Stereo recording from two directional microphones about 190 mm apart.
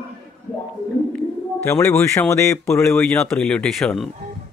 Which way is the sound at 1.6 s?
15° left (ahead or behind).